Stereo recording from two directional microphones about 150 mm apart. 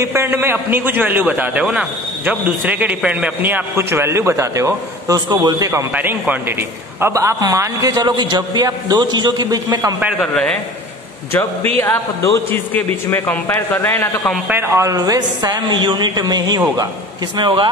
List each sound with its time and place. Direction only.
0.0 s a man's voice: 15° right (ahead or behind)
10.2 s a man's voice: 5° left (ahead or behind)
11.8 s a man's voice: 15° left (ahead or behind)
14.5 s a woman's voice: 15° right (ahead or behind); by 17.6 s 30° right (ahead or behind)